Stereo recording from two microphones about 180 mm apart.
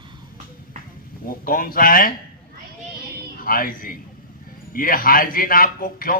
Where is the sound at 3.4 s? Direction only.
50° left (ahead or behind).